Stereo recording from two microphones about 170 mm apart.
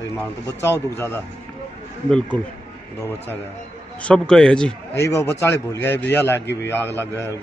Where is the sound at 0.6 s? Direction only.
15° left (ahead or behind).